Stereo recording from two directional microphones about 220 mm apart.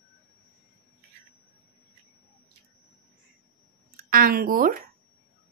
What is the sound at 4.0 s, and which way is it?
Speech, 40° right (ahead or behind).